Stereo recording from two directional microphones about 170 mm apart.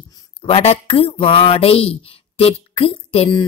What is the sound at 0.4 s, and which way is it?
Speech, 35° left (ahead or behind).